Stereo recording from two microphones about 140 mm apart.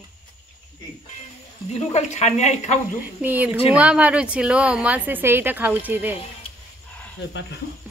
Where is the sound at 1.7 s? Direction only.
50° left (ahead or behind).